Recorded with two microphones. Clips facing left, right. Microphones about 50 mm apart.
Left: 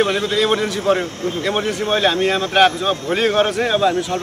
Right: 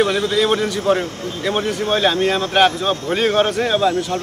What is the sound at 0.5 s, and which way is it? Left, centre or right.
A man's voice, centre.